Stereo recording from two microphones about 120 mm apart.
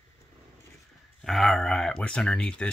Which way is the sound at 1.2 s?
Centre (ahead or behind).